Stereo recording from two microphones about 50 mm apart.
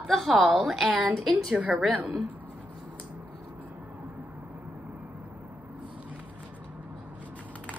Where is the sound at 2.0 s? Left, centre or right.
Right.